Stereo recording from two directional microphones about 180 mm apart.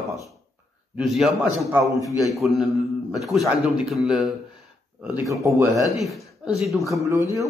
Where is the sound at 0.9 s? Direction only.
Centre (ahead or behind).